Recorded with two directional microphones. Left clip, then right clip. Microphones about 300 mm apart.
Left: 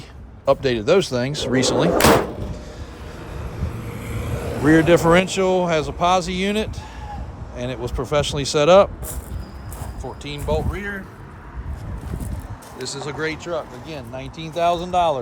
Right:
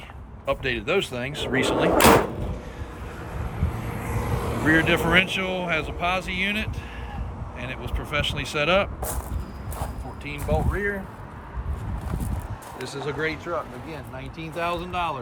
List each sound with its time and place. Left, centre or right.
0.4 s speech: centre
2.0 s speech: centre
3.8 s vehicle: centre
4.7 s speech: centre
10.2 s speech: centre
12.8 s speech: centre